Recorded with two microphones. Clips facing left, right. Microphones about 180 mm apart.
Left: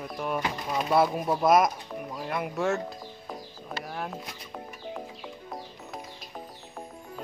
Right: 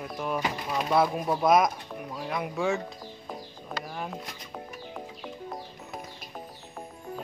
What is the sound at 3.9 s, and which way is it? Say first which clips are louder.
Music: left 1 dB; centre (ahead or behind).